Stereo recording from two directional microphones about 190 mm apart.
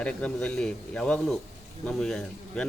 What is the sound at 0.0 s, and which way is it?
Speech, 5° left (ahead or behind).